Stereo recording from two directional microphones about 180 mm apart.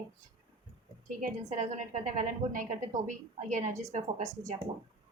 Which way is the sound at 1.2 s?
45° right (ahead or behind).